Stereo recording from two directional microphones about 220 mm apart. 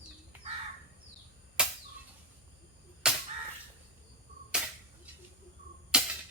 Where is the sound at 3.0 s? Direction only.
5° right (ahead or behind).